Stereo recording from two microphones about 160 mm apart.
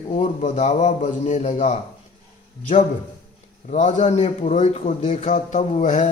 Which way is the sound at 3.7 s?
50° left (ahead or behind).